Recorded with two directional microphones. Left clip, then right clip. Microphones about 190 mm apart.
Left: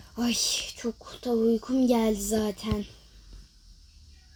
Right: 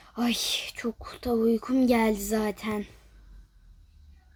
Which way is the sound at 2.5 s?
80° right.